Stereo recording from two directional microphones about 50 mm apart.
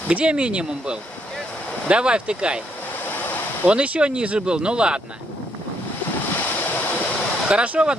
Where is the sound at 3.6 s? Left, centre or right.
Right.